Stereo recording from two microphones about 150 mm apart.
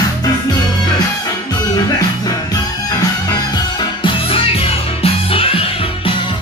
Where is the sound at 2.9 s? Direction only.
25° left (ahead or behind).